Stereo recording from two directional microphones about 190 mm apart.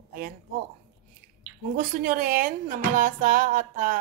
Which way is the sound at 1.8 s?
50° right (ahead or behind).